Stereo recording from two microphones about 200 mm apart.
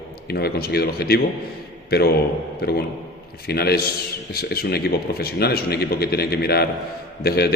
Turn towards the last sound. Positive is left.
turn(degrees=50)  # may be behind; listen again after turning